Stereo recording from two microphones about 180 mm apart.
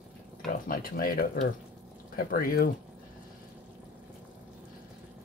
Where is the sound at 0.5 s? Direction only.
50° left (ahead or behind).